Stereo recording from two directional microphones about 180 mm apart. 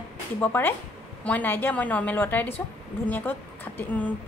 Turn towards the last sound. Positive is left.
turn(degrees=10)  # may be behind; listen again after turning